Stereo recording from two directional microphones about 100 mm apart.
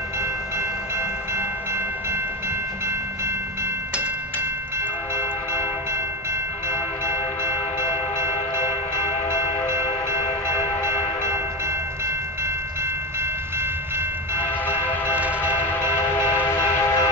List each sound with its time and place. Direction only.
5.1 s train: 25° right (ahead or behind)
6.7 s train: 25° right (ahead or behind)
10.5 s train: 25° right (ahead or behind)
13.6 s train: 25° right (ahead or behind)
14.4 s train: 20° left (ahead or behind)